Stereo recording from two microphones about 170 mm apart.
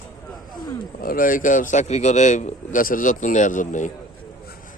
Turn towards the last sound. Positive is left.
turn(degrees=50)  # may be behind; listen again after turning